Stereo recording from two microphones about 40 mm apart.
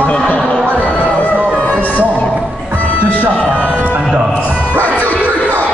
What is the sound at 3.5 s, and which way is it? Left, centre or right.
Music, right.